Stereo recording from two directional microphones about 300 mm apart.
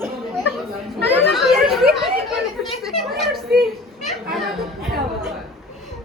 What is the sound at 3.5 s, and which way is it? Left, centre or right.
Children playing, right.